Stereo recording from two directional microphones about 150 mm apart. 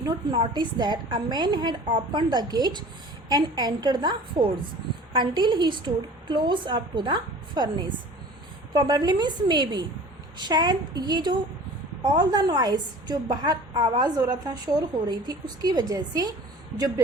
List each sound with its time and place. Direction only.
0.0 s a woman's voice: 30° right (ahead or behind)